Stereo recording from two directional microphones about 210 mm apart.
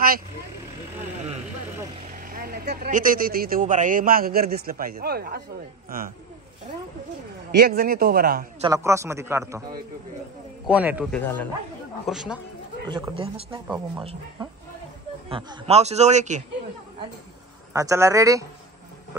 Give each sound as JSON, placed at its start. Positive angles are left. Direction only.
{"t": 2.1, "sound": "speech", "side_deg": -40}
{"t": 7.6, "sound": "speech", "side_deg": -45}
{"t": 8.6, "sound": "a man's voice", "side_deg": -15}
{"t": 10.7, "sound": "a man's voice", "side_deg": -5}
{"t": 11.1, "sound": "speech", "side_deg": 10}
{"t": 12.8, "sound": "speech", "side_deg": -20}
{"t": 15.2, "sound": "speech", "side_deg": -25}
{"t": 17.7, "sound": "a man's voice", "side_deg": -15}